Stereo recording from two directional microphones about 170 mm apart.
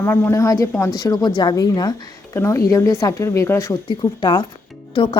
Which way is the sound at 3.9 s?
25° left (ahead or behind).